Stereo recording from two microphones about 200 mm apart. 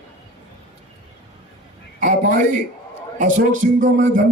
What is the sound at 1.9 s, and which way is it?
A man's voice, 40° right (ahead or behind).